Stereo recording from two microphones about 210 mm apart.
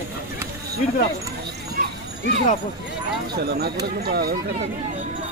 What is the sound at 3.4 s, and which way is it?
Speech, 50° right (ahead or behind).